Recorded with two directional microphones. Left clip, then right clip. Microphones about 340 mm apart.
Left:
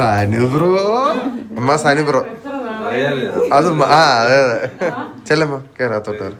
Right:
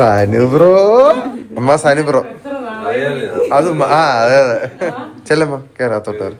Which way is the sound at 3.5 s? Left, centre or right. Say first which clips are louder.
Even; centre.